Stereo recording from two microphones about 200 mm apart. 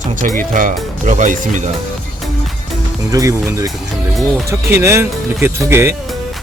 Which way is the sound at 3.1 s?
15° right (ahead or behind).